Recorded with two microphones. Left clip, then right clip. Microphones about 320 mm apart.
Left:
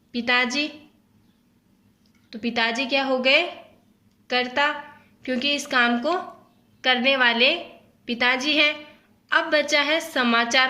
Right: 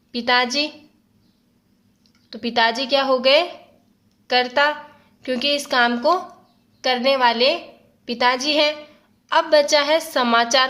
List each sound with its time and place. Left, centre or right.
0.1 s a woman's voice: right
2.3 s a woman's voice: right